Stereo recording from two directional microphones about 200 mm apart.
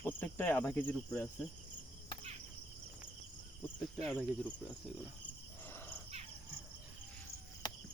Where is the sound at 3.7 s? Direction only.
15° left (ahead or behind).